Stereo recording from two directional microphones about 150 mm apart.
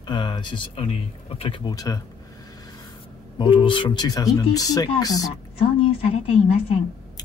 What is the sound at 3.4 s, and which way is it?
Speech, 35° left (ahead or behind).